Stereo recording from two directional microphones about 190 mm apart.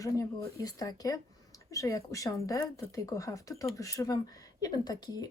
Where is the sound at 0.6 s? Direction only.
20° left (ahead or behind).